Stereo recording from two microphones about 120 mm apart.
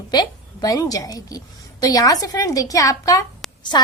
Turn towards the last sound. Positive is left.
turn(degrees=40)  # may be behind; listen again after turning